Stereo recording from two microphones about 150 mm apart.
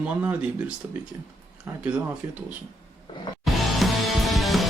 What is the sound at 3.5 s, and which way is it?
Music, centre (ahead or behind).